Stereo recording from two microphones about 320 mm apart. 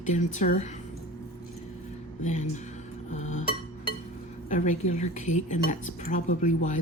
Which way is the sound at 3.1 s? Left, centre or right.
Left.